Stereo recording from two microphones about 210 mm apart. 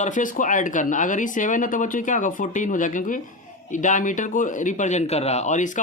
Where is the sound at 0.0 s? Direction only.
40° left (ahead or behind).